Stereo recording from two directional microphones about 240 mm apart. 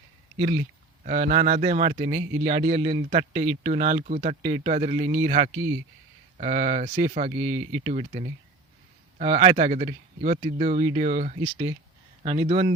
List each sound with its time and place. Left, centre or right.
1.0 s a man's voice: right
7.3 s speech: centre
7.9 s a man's voice: right
11.5 s a man's voice: centre